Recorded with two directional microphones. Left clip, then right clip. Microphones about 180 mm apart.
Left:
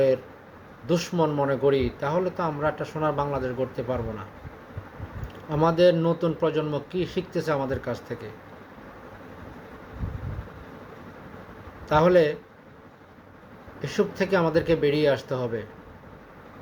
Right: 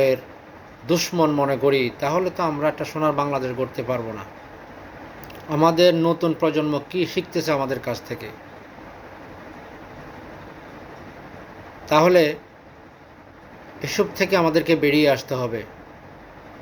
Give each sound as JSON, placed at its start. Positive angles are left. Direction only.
{"t": 0.9, "sound": "speech", "side_deg": 20}
{"t": 5.5, "sound": "speech", "side_deg": 20}
{"t": 11.9, "sound": "a man's voice", "side_deg": 20}
{"t": 13.8, "sound": "speech", "side_deg": 20}